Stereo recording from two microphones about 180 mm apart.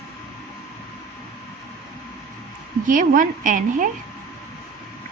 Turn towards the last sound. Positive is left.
turn(degrees=-45)  # may be behind; listen again after turning